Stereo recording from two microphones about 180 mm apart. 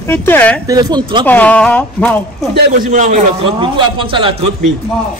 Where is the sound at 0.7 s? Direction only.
20° right (ahead or behind).